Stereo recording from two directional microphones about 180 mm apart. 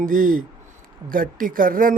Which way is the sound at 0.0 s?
50° right (ahead or behind).